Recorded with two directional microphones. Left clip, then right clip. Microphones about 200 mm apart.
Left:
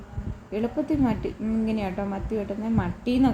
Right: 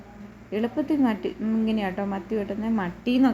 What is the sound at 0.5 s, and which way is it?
A woman's voice, centre (ahead or behind).